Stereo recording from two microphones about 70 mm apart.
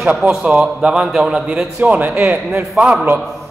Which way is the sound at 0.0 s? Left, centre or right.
Centre.